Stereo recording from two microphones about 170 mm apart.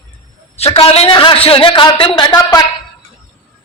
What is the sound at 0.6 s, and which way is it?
A man's voice, 35° left (ahead or behind).